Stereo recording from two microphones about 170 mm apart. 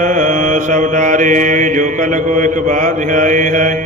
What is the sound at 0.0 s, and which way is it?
Mantra, 50° right (ahead or behind).